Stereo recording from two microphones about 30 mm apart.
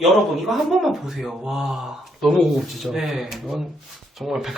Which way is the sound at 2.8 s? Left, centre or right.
Centre.